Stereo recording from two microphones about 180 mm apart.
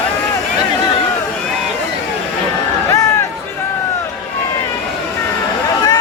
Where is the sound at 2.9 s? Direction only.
20° left (ahead or behind).